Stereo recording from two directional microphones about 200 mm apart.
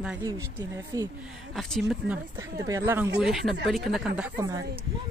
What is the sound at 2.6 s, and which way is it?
Speech, 15° right (ahead or behind).